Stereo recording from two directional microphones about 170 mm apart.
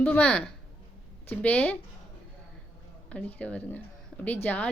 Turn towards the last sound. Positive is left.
turn(degrees=10)  # may be behind; listen again after turning